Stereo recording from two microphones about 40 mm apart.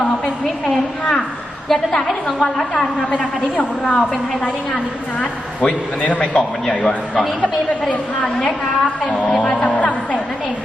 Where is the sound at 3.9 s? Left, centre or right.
Left.